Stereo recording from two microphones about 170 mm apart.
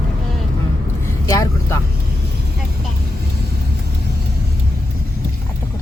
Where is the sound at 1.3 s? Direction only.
20° left (ahead or behind).